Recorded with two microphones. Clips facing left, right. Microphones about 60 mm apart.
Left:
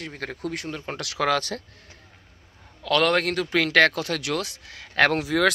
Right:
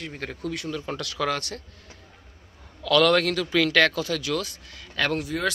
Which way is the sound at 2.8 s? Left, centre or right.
Left.